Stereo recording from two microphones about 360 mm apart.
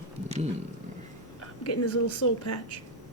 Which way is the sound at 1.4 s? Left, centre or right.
Left.